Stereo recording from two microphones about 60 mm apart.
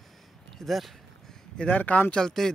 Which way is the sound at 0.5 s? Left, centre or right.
Centre.